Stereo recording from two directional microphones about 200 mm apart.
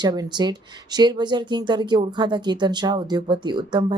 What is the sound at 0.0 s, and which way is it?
Speech, 20° right (ahead or behind).